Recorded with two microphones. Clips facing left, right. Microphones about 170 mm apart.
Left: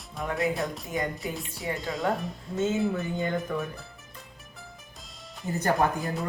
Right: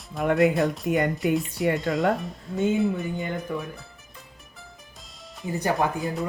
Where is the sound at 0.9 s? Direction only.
65° right (ahead or behind).